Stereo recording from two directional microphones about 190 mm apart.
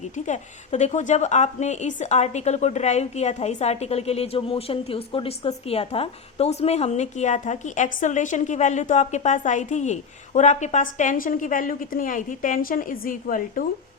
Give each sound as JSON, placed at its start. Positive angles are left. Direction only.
{"t": 0.3, "sound": "a woman's voice", "side_deg": 40}